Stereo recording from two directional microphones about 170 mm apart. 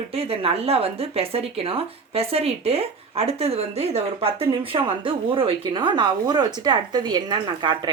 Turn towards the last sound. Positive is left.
turn(degrees=-25)  # may be behind; listen again after turning